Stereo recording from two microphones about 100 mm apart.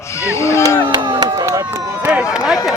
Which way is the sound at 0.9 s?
45° right (ahead or behind).